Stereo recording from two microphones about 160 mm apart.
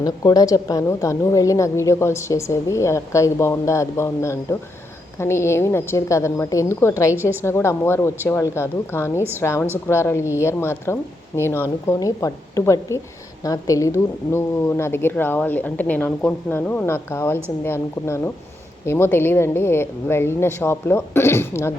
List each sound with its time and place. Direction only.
0.0 s a woman's voice: 25° left (ahead or behind)